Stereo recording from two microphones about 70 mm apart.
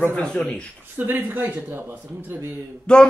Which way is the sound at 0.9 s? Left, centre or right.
Right.